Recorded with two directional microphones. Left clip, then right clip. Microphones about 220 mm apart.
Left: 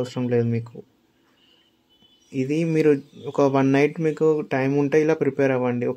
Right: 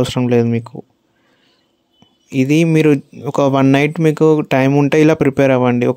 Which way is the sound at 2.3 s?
40° right (ahead or behind).